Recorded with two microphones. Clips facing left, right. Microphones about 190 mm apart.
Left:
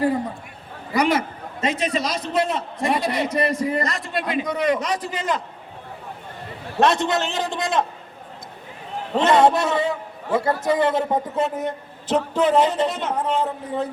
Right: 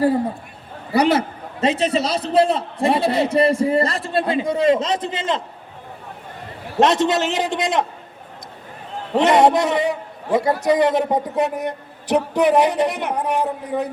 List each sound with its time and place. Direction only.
0.9 s a man's voice: 35° right (ahead or behind)
6.7 s a man's voice: 20° right (ahead or behind)
9.1 s a man's voice: 20° right (ahead or behind)